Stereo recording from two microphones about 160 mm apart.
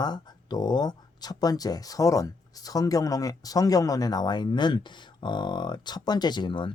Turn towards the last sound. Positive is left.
turn(degrees=30)  # may be behind; listen again after turning